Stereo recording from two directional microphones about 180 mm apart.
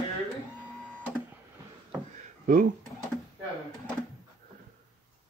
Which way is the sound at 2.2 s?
50° right (ahead or behind).